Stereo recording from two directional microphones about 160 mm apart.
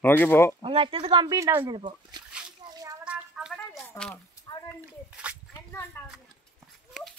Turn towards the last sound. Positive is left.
turn(degrees=15)  # may be behind; listen again after turning